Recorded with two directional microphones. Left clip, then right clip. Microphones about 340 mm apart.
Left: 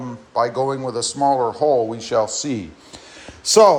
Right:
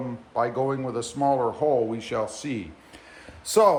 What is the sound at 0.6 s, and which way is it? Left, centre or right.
A man's voice, centre.